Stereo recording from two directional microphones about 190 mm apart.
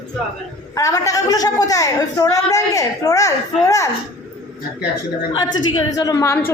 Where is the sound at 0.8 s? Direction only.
15° left (ahead or behind).